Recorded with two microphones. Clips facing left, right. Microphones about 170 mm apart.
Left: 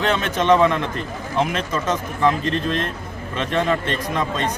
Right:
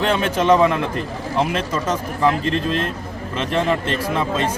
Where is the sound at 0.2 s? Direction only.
10° right (ahead or behind).